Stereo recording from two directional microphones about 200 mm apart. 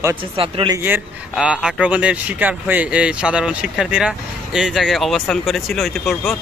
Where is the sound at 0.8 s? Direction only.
5° right (ahead or behind).